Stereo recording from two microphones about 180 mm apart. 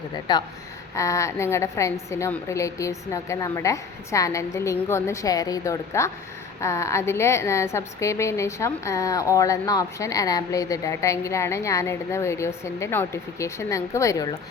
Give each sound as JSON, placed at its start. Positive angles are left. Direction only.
{"t": 0.3, "sound": "a woman's voice", "side_deg": 25}